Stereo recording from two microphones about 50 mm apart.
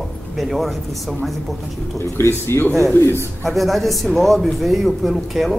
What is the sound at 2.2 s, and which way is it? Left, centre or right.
Speech, left.